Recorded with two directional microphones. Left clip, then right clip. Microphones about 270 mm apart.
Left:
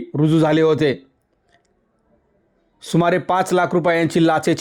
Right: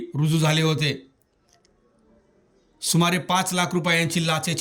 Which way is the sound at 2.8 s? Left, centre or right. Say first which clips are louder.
Left 5 dB; centre.